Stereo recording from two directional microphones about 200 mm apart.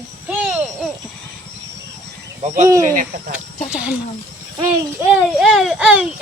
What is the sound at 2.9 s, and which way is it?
Speech, 40° right (ahead or behind).